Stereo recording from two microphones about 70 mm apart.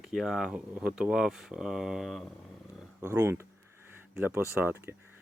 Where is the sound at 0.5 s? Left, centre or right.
Centre.